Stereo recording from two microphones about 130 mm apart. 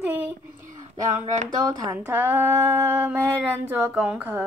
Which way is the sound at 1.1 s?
60° right (ahead or behind).